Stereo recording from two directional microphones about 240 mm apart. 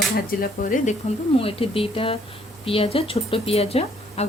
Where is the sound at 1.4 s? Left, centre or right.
Left.